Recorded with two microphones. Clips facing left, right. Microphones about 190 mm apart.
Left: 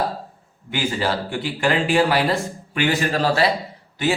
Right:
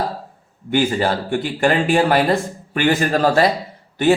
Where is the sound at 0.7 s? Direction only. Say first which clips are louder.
Right 5 dB; 50° right (ahead or behind).